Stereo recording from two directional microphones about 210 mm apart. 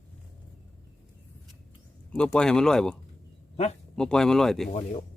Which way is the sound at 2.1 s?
5° left (ahead or behind).